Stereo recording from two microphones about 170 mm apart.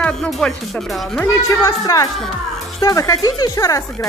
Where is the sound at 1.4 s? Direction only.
20° left (ahead or behind).